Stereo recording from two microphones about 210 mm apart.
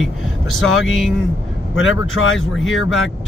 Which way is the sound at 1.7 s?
65° left (ahead or behind).